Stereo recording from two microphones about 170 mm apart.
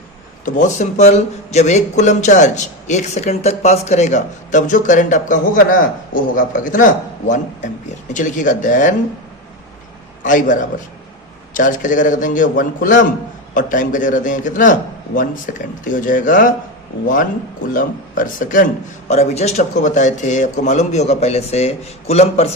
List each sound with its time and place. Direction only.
0.4 s speech: 45° left (ahead or behind)
10.2 s speech: 50° left (ahead or behind)
17.7 s a man's voice: 50° left (ahead or behind)